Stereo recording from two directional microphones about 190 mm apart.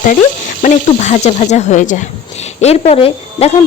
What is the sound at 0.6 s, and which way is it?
Speech, 40° left (ahead or behind).